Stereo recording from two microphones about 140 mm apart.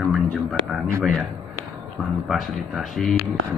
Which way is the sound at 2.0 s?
Centre (ahead or behind).